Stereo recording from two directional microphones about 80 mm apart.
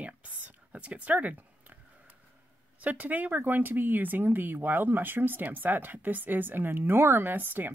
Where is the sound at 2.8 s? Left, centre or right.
Centre.